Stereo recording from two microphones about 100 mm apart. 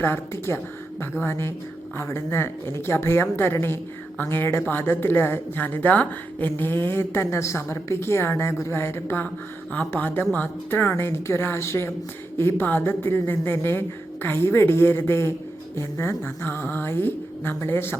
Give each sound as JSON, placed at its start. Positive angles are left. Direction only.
{"t": 0.0, "sound": "a woman's voice", "side_deg": 25}